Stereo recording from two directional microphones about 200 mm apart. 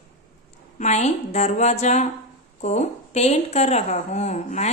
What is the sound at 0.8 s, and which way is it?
A woman's voice, 35° left (ahead or behind).